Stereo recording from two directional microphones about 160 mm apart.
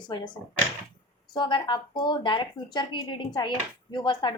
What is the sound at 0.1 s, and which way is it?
A woman's voice, 30° left (ahead or behind).